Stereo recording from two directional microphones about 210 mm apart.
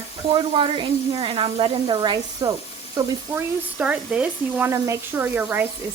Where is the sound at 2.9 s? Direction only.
10° right (ahead or behind).